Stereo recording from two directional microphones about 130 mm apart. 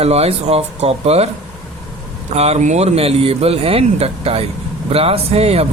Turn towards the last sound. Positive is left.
turn(degrees=-50)  # may be behind; listen again after turning